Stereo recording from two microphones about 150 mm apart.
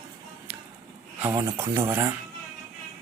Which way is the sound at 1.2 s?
20° right (ahead or behind).